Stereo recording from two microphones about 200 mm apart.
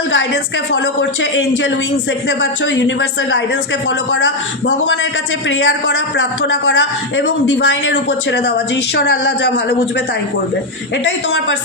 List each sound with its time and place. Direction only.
1.2 s a man's voice: 65° left (ahead or behind)
11.0 s a man's voice: 65° left (ahead or behind)